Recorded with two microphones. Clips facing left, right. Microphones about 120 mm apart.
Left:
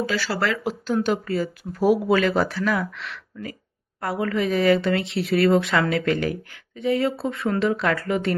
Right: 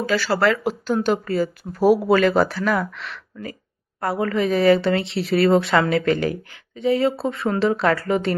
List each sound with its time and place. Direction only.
0.0 s speech: 45° right (ahead or behind)